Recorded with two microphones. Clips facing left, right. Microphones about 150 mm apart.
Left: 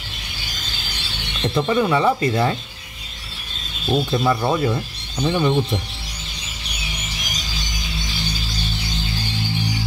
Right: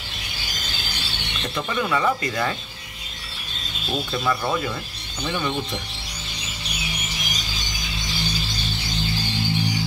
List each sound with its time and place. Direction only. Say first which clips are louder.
1.5 s speech: left 6 dB; 25° left (ahead or behind)
4.1 s speech: left 2 dB; 20° left (ahead or behind)